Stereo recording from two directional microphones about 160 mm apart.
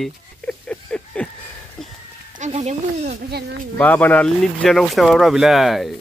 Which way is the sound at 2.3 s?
45° right (ahead or behind).